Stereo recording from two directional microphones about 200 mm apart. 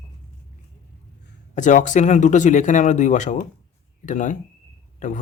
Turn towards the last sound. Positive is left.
turn(degrees=40)  # may be behind; listen again after turning